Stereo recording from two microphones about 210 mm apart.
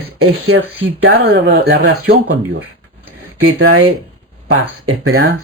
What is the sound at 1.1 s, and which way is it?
Speech, 55° right (ahead or behind).